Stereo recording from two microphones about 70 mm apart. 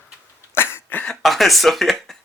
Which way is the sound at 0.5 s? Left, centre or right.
Left.